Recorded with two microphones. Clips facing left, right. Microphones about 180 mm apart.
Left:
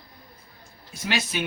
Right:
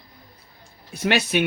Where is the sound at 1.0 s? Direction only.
65° right (ahead or behind).